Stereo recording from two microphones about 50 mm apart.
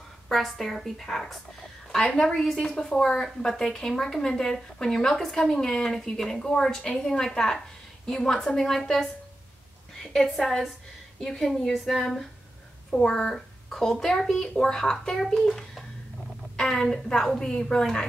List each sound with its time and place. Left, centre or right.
0.3 s a woman's voice: centre
10.2 s a woman's voice: centre
16.5 s a woman's voice: centre